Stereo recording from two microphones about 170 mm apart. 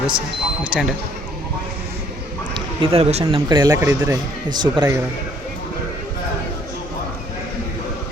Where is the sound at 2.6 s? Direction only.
35° right (ahead or behind).